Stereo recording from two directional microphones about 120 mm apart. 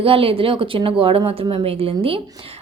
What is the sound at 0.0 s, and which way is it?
A woman's voice, 50° right (ahead or behind).